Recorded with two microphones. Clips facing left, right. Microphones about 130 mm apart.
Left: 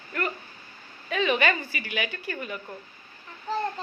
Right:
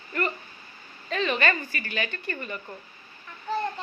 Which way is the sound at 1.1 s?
10° left (ahead or behind).